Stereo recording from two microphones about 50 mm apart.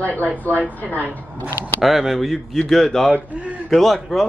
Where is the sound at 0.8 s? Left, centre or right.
Left.